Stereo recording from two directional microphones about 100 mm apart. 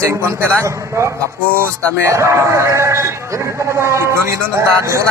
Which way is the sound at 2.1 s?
30° right (ahead or behind).